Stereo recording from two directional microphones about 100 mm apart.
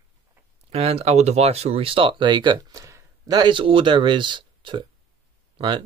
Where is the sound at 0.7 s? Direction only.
90° right; by 2.6 s 50° right (ahead or behind).